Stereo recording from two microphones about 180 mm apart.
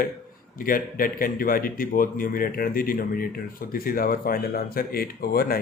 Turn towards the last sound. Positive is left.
turn(degrees=55)  # may be behind; listen again after turning